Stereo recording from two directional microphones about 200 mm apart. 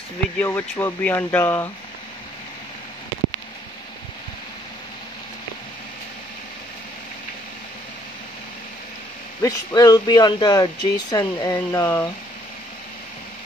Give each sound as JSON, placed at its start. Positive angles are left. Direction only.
{"t": 0.4, "sound": "speech", "side_deg": 10}
{"t": 9.4, "sound": "speech", "side_deg": 15}